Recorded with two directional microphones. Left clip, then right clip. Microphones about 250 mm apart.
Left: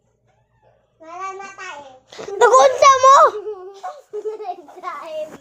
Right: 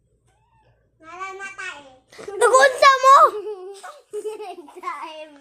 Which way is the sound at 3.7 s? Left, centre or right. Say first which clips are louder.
Left 6 dB; right.